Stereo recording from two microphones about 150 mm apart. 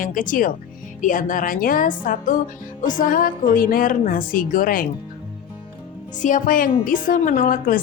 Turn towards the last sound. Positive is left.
turn(degrees=70)  # may be behind; listen again after turning